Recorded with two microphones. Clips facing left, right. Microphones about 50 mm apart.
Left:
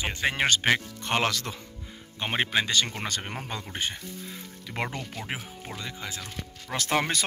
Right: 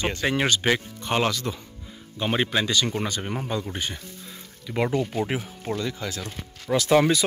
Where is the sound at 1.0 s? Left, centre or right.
Left.